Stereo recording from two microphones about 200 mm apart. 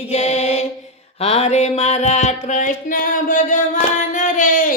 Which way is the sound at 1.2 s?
30° left (ahead or behind).